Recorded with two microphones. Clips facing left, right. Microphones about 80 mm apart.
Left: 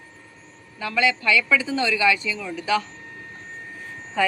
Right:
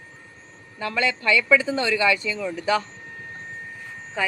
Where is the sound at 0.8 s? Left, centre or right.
Right.